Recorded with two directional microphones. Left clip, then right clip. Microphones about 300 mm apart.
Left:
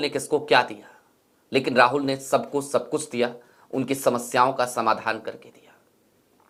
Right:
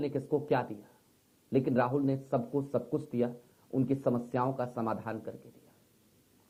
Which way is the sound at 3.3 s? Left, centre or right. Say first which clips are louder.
Left 5 dB; centre.